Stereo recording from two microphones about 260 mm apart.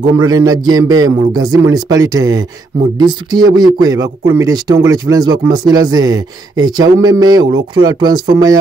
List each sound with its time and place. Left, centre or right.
0.0 s speech: centre